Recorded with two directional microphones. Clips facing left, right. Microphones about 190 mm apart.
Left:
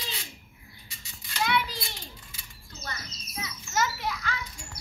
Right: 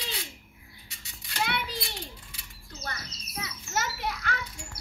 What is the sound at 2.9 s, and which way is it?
Children playing, 60° right (ahead or behind).